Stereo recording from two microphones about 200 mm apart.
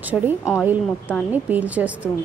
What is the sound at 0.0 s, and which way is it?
A woman's voice, 10° right (ahead or behind).